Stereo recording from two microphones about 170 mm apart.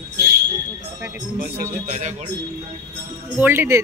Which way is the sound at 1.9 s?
45° right (ahead or behind).